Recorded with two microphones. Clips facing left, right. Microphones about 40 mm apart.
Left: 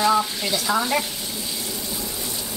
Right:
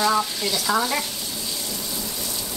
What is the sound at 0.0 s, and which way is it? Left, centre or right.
Frying, centre.